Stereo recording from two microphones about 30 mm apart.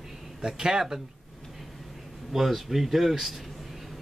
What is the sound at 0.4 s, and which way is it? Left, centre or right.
Speech, right.